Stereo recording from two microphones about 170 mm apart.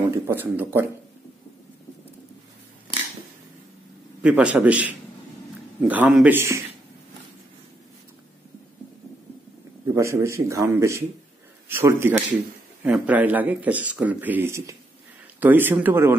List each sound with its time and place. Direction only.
0.1 s a man's voice: 10° right (ahead or behind)
4.2 s a man's voice: 5° right (ahead or behind)
9.9 s a man's voice: 15° right (ahead or behind)